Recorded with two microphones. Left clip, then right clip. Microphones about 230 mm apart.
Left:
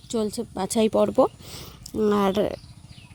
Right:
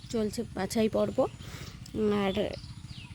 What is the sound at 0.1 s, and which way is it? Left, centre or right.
A woman's voice, left.